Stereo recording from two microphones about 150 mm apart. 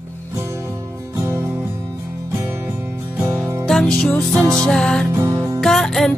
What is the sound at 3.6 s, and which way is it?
Music, centre (ahead or behind).